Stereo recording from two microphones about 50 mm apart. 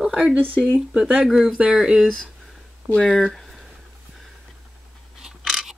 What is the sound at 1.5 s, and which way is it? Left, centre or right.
Speech, right.